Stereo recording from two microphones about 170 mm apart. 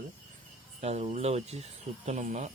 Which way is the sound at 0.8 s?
40° right (ahead or behind).